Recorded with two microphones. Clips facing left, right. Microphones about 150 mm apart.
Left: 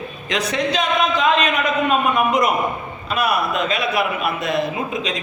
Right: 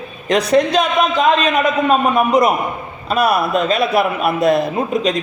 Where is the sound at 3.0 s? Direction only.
35° right (ahead or behind).